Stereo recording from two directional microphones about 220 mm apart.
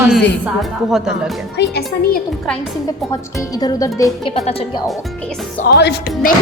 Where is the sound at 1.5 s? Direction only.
45° left (ahead or behind).